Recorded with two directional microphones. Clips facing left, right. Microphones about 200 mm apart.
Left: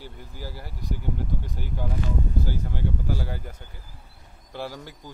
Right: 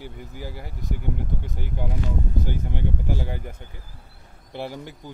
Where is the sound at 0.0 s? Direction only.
15° right (ahead or behind).